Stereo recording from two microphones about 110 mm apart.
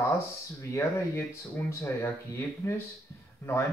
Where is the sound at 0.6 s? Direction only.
25° left (ahead or behind).